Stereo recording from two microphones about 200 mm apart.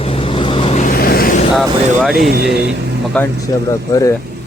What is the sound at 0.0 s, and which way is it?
Vehicle, 30° left (ahead or behind).